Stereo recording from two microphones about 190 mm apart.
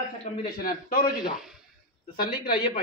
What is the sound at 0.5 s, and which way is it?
Speech, 50° left (ahead or behind).